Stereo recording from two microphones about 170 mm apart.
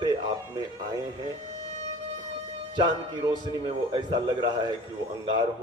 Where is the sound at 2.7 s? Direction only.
25° right (ahead or behind).